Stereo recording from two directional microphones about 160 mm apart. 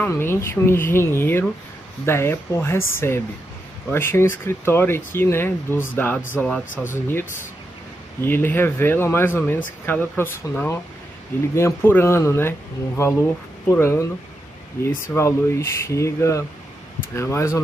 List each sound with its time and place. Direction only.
0.1 s speech: 15° left (ahead or behind)